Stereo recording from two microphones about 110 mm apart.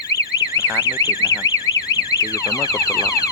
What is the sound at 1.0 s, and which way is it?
Speech, 30° left (ahead or behind).